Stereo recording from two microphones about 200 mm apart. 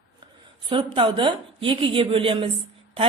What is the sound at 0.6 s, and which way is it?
Speech, 25° right (ahead or behind).